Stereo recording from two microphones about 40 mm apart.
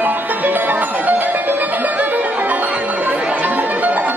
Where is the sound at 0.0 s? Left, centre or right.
Right.